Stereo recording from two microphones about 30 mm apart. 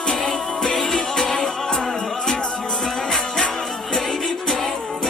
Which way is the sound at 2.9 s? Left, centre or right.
Centre.